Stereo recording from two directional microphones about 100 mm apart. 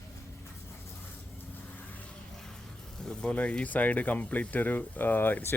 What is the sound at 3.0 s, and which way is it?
Speech, 10° left (ahead or behind).